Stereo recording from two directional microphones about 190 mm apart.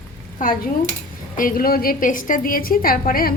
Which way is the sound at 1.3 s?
50° left (ahead or behind).